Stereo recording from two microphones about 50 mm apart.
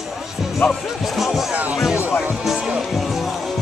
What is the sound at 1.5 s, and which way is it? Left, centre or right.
Music, right.